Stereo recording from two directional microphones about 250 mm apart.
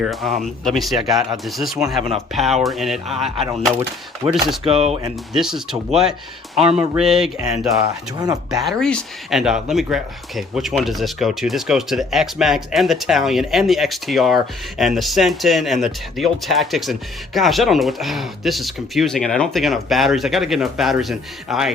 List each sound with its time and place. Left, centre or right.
0.0 s speech: centre
4.2 s speech: centre
4.6 s speech: right
5.3 s speech: centre
6.6 s speech: right
6.9 s speech: centre